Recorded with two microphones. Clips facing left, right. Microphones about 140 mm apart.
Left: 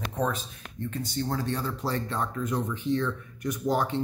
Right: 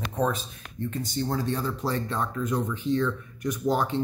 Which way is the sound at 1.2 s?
15° right (ahead or behind).